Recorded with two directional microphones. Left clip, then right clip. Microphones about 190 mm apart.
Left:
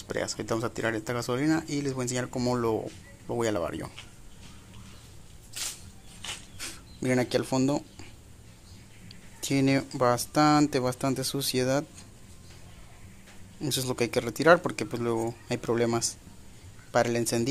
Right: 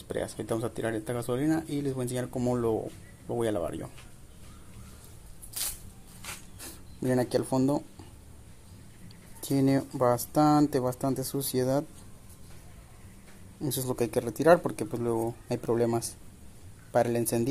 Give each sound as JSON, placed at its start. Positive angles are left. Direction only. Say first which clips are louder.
{"t": 0.1, "sound": "speech", "louder": "left 2 dB", "side_deg": -5}
{"t": 6.2, "sound": "a sound", "louder": "left 5 dB", "side_deg": 5}
{"t": 7.2, "sound": "speech", "louder": "even", "side_deg": -5}
{"t": 9.4, "sound": "speech", "louder": "left 1 dB", "side_deg": -5}
{"t": 10.8, "sound": "speech", "louder": "left 1 dB", "side_deg": 15}
{"t": 11.2, "sound": "speech", "louder": "left 2 dB", "side_deg": -5}
{"t": 13.7, "sound": "speech", "louder": "left 2 dB", "side_deg": -5}